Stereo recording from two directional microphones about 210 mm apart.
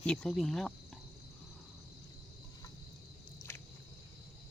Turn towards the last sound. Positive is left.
turn(degrees=15)  # may be behind; listen again after turning